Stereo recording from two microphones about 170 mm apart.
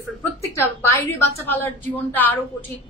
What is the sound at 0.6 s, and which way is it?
A woman's voice, 15° left (ahead or behind).